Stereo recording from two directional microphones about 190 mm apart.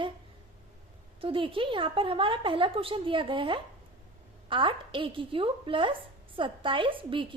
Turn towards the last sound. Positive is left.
turn(degrees=-25)  # may be behind; listen again after turning